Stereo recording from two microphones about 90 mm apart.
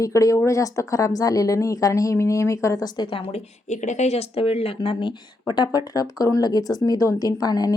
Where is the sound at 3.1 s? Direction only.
90° left; by 5.1 s 65° left (ahead or behind).